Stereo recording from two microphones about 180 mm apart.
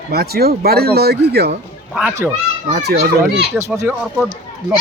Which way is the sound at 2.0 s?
10° right (ahead or behind).